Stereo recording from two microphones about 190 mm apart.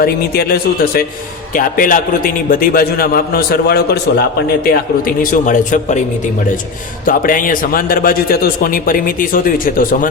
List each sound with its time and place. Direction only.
0.0 s a man's voice: 55° left (ahead or behind)
7.0 s a man's voice: 45° left (ahead or behind)